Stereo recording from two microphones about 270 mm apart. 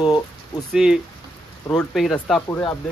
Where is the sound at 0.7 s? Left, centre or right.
Centre.